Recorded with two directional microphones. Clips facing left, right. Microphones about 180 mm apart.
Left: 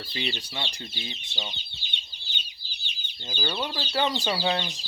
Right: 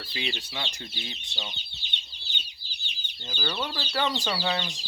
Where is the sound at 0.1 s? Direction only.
Centre (ahead or behind).